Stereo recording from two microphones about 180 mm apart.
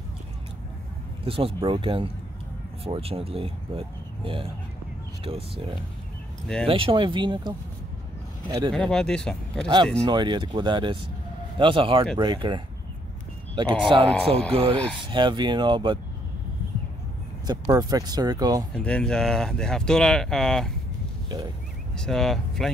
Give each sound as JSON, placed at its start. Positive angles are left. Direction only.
{"t": 1.2, "sound": "speech", "side_deg": -30}
{"t": 6.4, "sound": "speech", "side_deg": 5}
{"t": 6.7, "sound": "speech", "side_deg": -30}
{"t": 8.7, "sound": "speech", "side_deg": 5}
{"t": 9.9, "sound": "speech", "side_deg": -25}
{"t": 13.8, "sound": "speech", "side_deg": -30}
{"t": 17.5, "sound": "speech", "side_deg": -20}
{"t": 18.8, "sound": "speech", "side_deg": 5}
{"t": 21.9, "sound": "speech", "side_deg": 0}